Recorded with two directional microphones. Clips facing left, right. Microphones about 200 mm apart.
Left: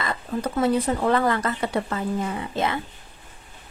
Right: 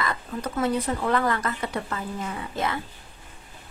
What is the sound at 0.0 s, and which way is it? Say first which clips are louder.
Speech: left 3 dB; 30° left (ahead or behind).